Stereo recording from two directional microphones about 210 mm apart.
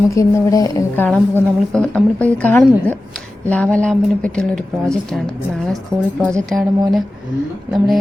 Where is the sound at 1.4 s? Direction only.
5° left (ahead or behind).